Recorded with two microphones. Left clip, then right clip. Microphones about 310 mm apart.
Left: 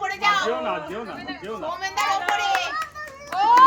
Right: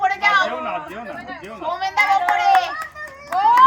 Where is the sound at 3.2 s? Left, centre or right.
Centre.